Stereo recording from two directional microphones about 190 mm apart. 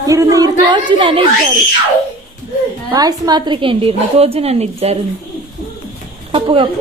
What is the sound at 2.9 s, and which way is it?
A woman's voice, 20° right (ahead or behind).